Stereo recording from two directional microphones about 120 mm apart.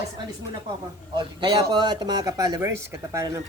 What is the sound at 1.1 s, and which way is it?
Speech, 40° right (ahead or behind).